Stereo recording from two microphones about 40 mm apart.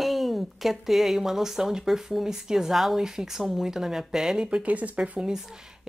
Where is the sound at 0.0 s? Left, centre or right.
Centre.